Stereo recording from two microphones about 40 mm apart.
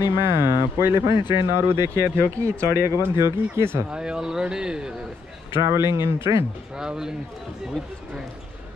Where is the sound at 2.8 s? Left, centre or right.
Right.